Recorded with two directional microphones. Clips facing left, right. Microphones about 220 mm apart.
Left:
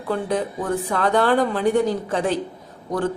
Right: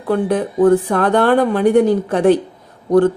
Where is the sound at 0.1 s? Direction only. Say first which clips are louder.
Right 6 dB; 55° right (ahead or behind).